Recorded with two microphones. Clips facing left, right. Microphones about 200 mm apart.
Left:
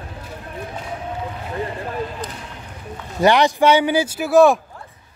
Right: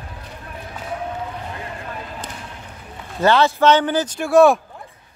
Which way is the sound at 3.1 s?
15° left (ahead or behind).